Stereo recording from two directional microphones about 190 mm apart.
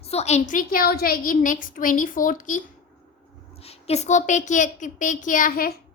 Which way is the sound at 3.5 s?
30° left (ahead or behind).